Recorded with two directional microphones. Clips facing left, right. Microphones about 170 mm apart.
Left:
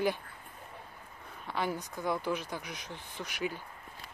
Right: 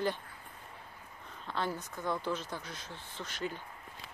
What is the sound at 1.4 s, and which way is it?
Speech, 10° left (ahead or behind).